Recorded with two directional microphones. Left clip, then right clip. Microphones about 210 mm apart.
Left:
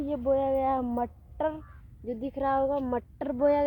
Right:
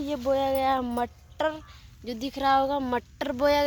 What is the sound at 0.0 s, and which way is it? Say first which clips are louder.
Speech: right 1 dB; 25° right (ahead or behind).